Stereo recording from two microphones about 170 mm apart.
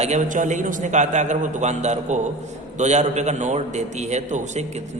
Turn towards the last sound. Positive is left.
turn(degrees=-40)  # may be behind; listen again after turning